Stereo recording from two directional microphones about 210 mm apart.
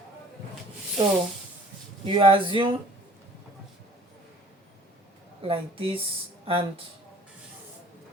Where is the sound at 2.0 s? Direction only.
25° right (ahead or behind).